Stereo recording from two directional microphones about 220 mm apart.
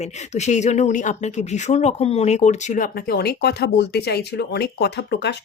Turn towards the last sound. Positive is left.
turn(degrees=50)  # may be behind; listen again after turning